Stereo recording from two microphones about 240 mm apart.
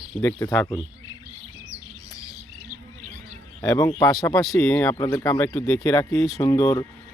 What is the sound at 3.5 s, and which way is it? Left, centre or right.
Speech, centre.